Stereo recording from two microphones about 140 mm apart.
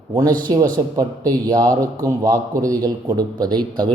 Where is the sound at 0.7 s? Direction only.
25° right (ahead or behind).